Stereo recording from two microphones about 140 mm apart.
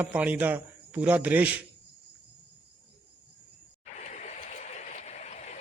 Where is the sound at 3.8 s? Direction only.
60° left (ahead or behind).